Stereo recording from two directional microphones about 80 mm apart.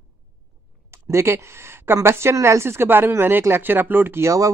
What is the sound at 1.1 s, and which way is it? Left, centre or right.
Speech, right.